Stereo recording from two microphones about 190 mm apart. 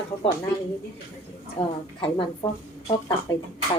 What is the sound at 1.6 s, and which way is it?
Speech, 25° left (ahead or behind).